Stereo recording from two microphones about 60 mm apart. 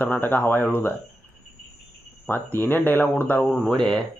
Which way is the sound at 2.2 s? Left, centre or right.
Left.